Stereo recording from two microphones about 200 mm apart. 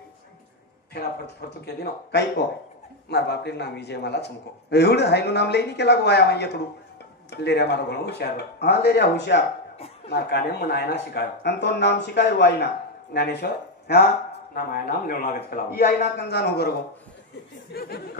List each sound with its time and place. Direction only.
1.4 s a man's voice: 50° left (ahead or behind)
14.5 s a man's voice: 45° left (ahead or behind)
17.7 s a man's voice: 50° left (ahead or behind)